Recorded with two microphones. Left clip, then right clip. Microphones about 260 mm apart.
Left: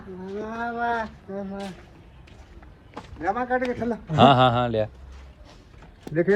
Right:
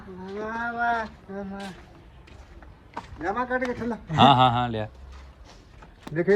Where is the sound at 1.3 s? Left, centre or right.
Right.